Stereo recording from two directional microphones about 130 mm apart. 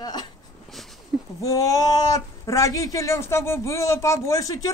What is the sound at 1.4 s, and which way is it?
Speech, 25° left (ahead or behind).